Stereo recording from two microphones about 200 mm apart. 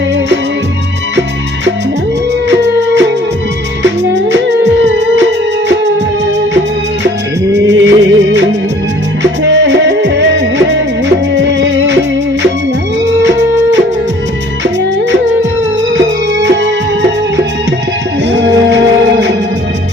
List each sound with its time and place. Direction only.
2.5 s music: 60° right (ahead or behind)
7.5 s music: 60° right (ahead or behind)
13.1 s music: 65° right (ahead or behind)
16.0 s music: 65° right (ahead or behind)